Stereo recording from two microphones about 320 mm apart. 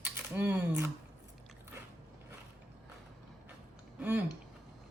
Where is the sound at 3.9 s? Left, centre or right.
Centre.